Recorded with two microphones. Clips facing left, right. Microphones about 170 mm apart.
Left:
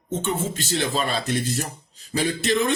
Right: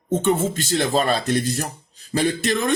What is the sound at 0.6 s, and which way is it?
Speech, 45° right (ahead or behind).